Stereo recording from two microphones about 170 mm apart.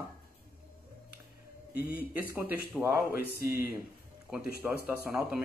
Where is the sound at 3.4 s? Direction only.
60° left (ahead or behind).